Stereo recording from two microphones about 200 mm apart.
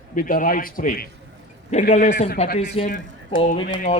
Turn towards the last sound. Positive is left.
turn(degrees=40)  # may be behind; listen again after turning